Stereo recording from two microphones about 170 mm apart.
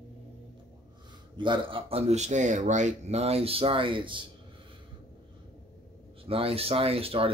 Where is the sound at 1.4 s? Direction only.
30° right (ahead or behind).